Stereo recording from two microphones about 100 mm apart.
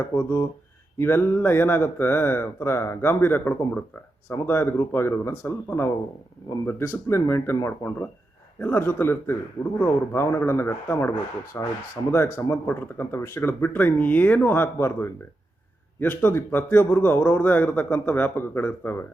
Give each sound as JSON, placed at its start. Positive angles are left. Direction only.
{"t": 0.0, "sound": "a man's voice", "side_deg": 25}